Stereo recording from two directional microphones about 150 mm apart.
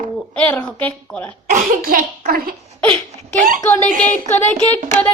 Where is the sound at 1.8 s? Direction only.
70° right (ahead or behind).